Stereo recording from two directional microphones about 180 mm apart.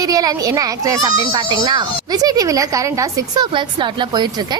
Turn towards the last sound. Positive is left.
turn(degrees=-25)  # may be behind; listen again after turning